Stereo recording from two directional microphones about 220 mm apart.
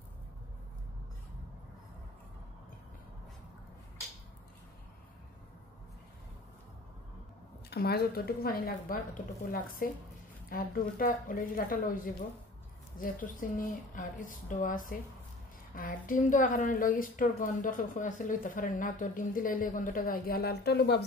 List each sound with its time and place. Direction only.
7.7 s a woman's voice: 45° left (ahead or behind)